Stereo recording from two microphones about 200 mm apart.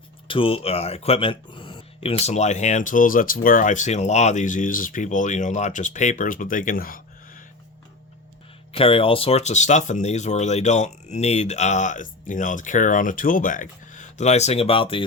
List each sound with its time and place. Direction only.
0.3 s speech: 25° left (ahead or behind); by 7.4 s 45° left (ahead or behind)
8.7 s speech: 30° left (ahead or behind)